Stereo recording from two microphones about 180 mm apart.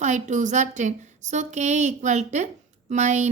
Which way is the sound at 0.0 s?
45° right (ahead or behind).